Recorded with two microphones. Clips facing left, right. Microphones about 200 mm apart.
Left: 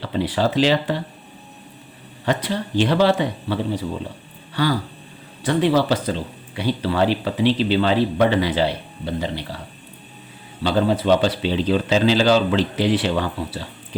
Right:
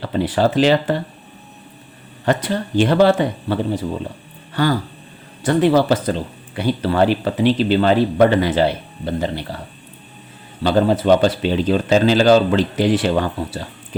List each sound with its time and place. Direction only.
0.0 s a man's voice: 50° right (ahead or behind)
2.2 s a man's voice: 50° right (ahead or behind)
10.6 s a man's voice: 50° right (ahead or behind)